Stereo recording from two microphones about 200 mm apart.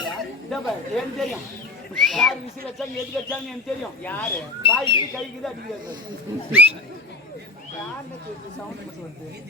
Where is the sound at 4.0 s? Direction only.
10° left (ahead or behind).